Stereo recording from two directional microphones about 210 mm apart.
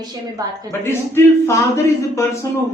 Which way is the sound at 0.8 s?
10° left (ahead or behind).